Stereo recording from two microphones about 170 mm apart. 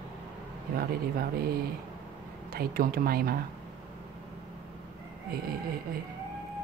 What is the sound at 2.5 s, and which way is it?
Speech, 60° right (ahead or behind).